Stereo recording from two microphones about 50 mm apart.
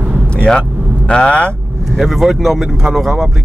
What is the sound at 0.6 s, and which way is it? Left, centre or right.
Vehicle, left.